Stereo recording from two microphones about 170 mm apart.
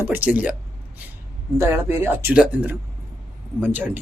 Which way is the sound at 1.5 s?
15° right (ahead or behind).